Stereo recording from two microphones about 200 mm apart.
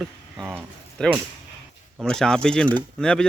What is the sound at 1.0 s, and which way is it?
Speech, 5° left (ahead or behind).